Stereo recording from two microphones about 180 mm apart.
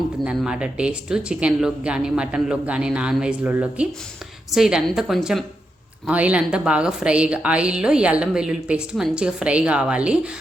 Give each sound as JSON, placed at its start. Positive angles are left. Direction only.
{"t": 0.3, "sound": "a woman's voice", "side_deg": -5}